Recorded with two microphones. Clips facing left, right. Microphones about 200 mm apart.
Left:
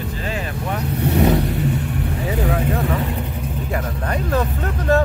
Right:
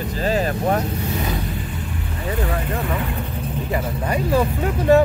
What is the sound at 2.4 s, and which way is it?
Vehicle, centre (ahead or behind).